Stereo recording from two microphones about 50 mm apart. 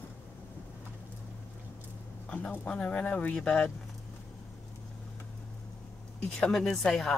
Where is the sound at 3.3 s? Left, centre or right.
Centre.